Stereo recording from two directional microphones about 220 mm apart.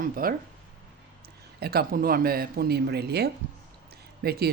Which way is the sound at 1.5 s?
45° right (ahead or behind).